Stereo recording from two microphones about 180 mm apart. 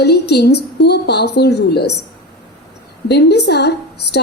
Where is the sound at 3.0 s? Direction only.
65° left (ahead or behind).